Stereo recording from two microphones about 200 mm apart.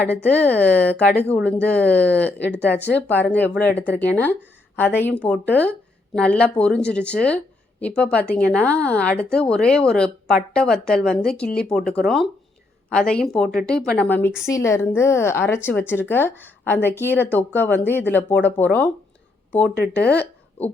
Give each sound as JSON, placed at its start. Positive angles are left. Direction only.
{"t": 0.1, "sound": "speech", "side_deg": 5}
{"t": 2.7, "sound": "speech", "side_deg": 55}
{"t": 3.1, "sound": "speech", "side_deg": 10}
{"t": 20.0, "sound": "speech", "side_deg": 55}